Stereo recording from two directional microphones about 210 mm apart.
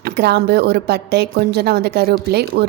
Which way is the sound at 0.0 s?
50° right (ahead or behind).